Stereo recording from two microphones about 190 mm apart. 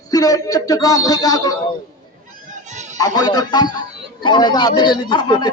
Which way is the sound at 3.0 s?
20° left (ahead or behind).